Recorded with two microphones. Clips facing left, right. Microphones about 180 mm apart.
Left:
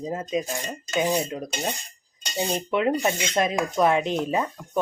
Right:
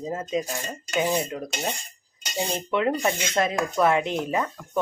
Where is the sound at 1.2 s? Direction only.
20° left (ahead or behind).